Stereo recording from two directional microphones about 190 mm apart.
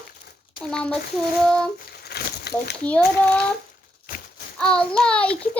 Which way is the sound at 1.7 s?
55° left (ahead or behind).